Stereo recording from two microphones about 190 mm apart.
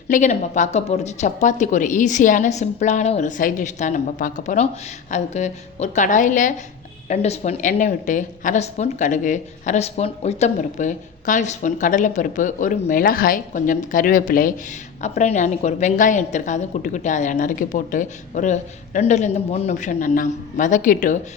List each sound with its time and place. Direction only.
0.1 s a woman's voice: 40° left (ahead or behind)